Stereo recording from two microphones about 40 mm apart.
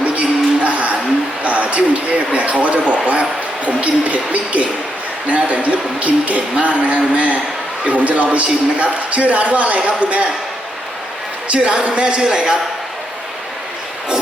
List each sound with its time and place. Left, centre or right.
0.0 s music: right
1.5 s speech: right
11.4 s speech: right